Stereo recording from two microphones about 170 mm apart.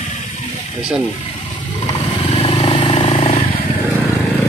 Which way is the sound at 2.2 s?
30° left (ahead or behind).